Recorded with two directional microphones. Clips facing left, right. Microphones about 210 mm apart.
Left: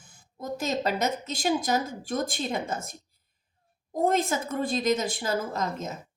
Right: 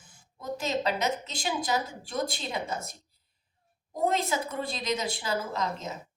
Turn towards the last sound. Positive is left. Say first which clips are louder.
# left 2 dB
turn(degrees=50)  # may be behind; listen again after turning